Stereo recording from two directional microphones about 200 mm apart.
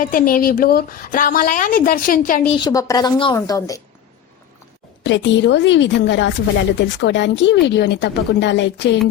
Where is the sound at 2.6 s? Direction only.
15° left (ahead or behind).